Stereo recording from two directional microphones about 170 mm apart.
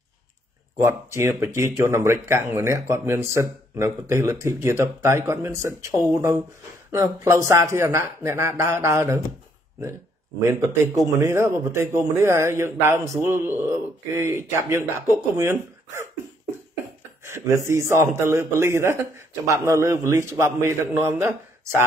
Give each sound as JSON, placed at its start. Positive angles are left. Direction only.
{"t": 0.7, "sound": "a man's voice", "side_deg": -15}
{"t": 10.4, "sound": "a man's voice", "side_deg": -15}
{"t": 17.2, "sound": "a man's voice", "side_deg": -15}